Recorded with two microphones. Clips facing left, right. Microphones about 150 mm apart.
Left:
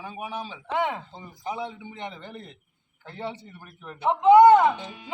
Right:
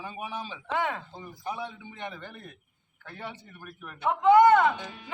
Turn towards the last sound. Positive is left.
turn(degrees=15)  # may be behind; listen again after turning